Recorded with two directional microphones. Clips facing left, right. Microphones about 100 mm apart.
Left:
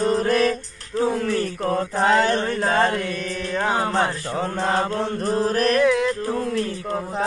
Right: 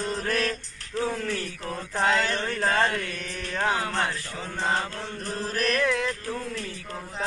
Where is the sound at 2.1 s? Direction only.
50° left (ahead or behind).